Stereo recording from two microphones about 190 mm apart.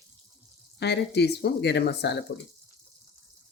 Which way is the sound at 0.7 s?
60° left (ahead or behind).